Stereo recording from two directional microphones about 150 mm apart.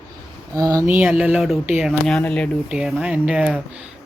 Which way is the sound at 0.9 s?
10° right (ahead or behind).